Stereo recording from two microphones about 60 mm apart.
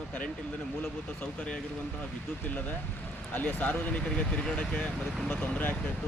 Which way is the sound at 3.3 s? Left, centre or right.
Left.